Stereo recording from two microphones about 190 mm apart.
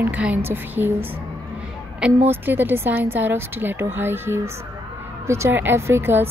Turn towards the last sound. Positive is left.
turn(degrees=-10)  # may be behind; listen again after turning